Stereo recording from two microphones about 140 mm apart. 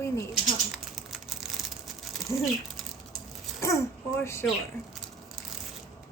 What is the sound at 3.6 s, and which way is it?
Speech, 20° left (ahead or behind).